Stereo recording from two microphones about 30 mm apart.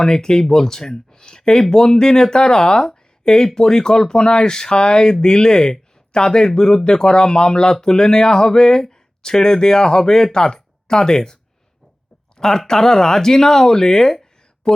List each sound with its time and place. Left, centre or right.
0.0 s speech: left
12.4 s speech: centre